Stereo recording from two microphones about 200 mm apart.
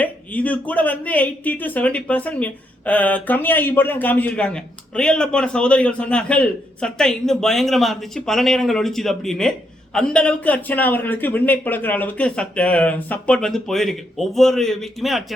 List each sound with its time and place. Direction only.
0.0 s a woman's voice: 5° left (ahead or behind)